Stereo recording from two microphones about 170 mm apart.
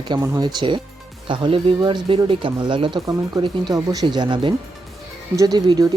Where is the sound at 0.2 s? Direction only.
25° right (ahead or behind).